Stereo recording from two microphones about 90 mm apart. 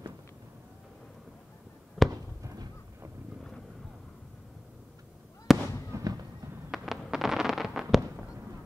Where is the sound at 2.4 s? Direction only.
35° right (ahead or behind).